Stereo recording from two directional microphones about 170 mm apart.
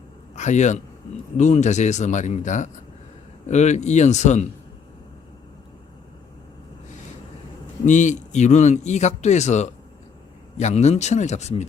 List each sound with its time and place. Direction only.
0.3 s a man's voice: 45° left (ahead or behind)
7.9 s speech: 45° left (ahead or behind)